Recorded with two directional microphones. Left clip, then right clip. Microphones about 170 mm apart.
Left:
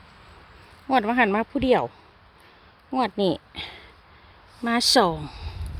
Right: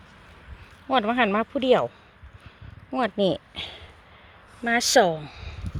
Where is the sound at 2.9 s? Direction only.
25° left (ahead or behind); by 5.5 s 40° left (ahead or behind).